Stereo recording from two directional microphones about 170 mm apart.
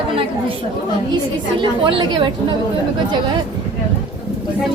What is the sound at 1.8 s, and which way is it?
Speech, 30° right (ahead or behind).